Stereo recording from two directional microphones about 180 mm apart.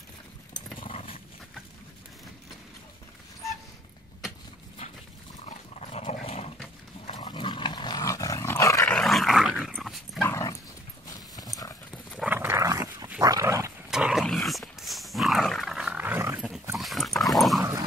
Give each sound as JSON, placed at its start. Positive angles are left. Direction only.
{"t": 0.7, "sound": "dog", "side_deg": 30}
{"t": 5.4, "sound": "dog", "side_deg": 35}
{"t": 8.9, "sound": "dog", "side_deg": 0}
{"t": 10.2, "sound": "dog", "side_deg": 15}
{"t": 11.1, "sound": "clip-clop", "side_deg": 20}
{"t": 12.3, "sound": "dog", "side_deg": -10}
{"t": 13.8, "sound": "dog", "side_deg": -5}
{"t": 16.7, "sound": "dog", "side_deg": 0}
{"t": 17.6, "sound": "dog", "side_deg": -20}